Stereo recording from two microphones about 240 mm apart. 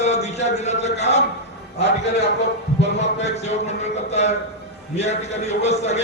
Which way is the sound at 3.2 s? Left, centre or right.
Left.